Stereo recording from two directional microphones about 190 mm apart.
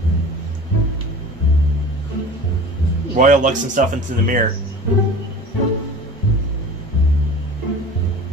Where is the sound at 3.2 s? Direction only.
40° right (ahead or behind).